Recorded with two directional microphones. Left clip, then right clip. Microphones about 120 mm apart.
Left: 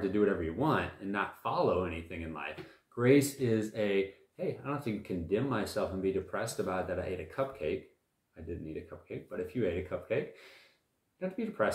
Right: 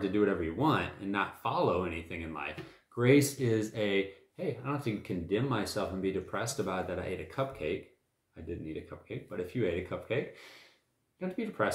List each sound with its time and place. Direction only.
0.0 s speech: 25° right (ahead or behind)